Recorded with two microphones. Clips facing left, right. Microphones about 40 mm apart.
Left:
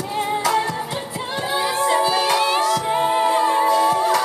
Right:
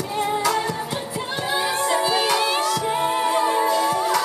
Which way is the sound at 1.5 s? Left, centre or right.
Centre.